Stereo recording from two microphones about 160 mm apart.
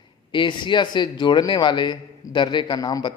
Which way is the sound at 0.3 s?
30° left (ahead or behind).